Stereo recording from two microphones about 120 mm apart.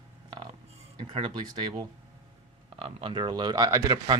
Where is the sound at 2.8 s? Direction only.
50° right (ahead or behind); by 4.1 s 35° right (ahead or behind).